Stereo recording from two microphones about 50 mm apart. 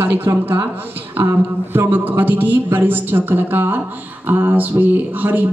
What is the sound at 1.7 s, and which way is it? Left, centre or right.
A woman's voice, right.